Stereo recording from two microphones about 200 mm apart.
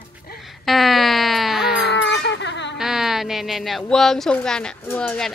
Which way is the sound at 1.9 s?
60° left (ahead or behind).